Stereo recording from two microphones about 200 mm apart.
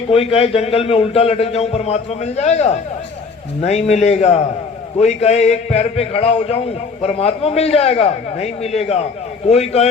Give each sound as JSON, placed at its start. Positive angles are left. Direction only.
{"t": 0.1, "sound": "a man's voice", "side_deg": 30}